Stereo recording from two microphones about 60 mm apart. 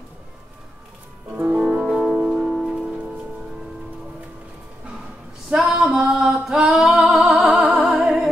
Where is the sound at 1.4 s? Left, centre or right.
Centre.